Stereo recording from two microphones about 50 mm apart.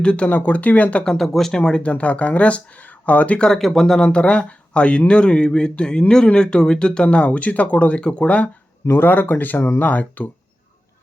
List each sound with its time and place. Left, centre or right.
0.0 s speech: centre
0.3 s speech: left
1.0 s speech: centre
1.9 s speech: left
3.3 s speech: centre
4.0 s speech: left
8.9 s speech: left